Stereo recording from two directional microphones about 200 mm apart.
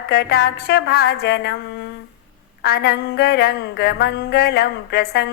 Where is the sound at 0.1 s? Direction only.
50° left (ahead or behind).